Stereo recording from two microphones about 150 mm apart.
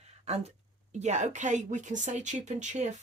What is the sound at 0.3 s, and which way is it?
A woman's voice, 45° right (ahead or behind).